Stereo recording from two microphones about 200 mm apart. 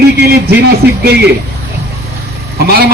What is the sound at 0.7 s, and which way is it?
Speech, 50° right (ahead or behind).